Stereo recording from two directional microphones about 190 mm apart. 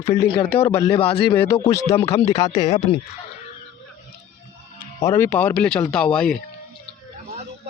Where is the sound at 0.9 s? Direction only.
25° left (ahead or behind).